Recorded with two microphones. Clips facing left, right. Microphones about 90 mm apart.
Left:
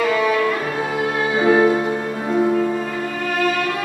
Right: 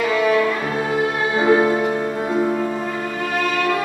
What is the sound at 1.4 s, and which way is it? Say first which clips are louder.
Music: left 1 dB; 15° right (ahead or behind).